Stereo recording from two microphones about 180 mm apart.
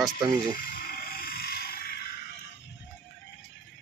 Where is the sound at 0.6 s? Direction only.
50° left (ahead or behind).